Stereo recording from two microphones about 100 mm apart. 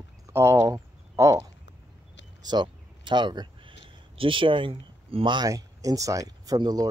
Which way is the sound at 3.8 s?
65° right (ahead or behind).